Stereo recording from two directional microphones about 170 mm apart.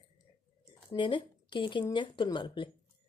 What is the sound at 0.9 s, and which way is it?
Speech, 30° left (ahead or behind).